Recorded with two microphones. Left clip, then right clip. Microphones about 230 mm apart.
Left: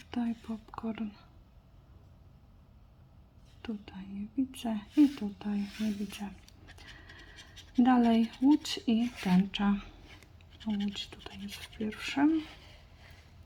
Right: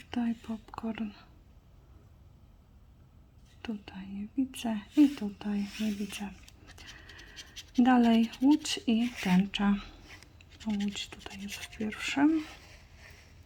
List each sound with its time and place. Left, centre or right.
0.1 s speech: centre
3.6 s speech: centre